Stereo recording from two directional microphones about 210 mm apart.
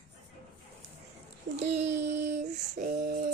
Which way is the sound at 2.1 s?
35° right (ahead or behind).